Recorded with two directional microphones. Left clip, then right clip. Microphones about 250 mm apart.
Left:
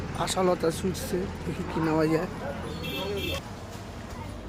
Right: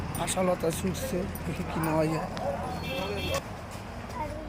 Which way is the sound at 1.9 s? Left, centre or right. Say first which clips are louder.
Left 3 dB; centre.